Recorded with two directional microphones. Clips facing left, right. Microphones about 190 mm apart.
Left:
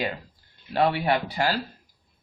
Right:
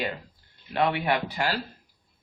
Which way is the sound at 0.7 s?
35° left (ahead or behind).